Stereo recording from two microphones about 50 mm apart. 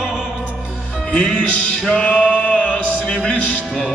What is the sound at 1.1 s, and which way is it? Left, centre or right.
Music, left.